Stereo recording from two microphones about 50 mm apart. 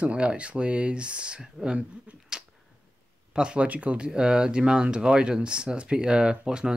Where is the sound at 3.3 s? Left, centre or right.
Centre.